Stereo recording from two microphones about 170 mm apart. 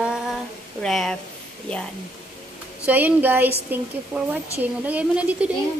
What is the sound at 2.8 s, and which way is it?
Speech, 10° right (ahead or behind).